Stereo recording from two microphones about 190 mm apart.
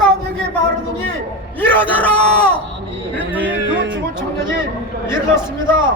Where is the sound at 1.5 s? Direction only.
10° left (ahead or behind).